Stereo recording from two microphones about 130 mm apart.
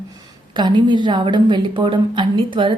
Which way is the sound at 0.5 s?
35° right (ahead or behind).